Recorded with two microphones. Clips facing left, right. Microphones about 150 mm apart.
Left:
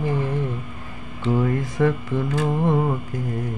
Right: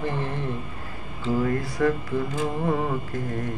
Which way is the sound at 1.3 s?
20° left (ahead or behind).